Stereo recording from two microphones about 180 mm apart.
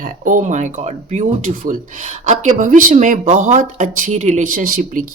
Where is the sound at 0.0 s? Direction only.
45° right (ahead or behind).